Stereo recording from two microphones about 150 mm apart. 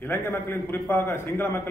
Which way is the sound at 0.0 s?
15° left (ahead or behind).